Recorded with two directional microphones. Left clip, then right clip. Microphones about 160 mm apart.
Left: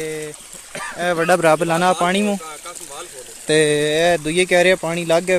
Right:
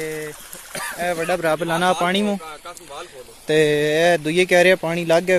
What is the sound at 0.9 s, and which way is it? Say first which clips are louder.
Speech: left 5 dB; 60° left (ahead or behind).